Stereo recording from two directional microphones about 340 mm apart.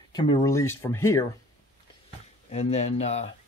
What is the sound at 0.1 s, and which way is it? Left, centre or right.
Speech, centre.